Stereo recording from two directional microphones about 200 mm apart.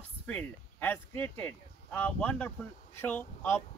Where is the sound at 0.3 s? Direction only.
10° left (ahead or behind).